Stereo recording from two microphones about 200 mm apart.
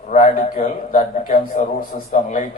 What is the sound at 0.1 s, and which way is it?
A man's voice, 35° left (ahead or behind).